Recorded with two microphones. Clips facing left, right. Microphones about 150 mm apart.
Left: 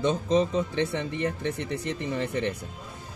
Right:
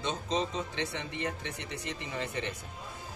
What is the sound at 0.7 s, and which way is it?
Speech, 55° left (ahead or behind).